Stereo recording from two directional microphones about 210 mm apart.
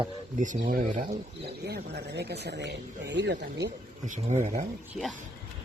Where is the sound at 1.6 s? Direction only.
50° right (ahead or behind).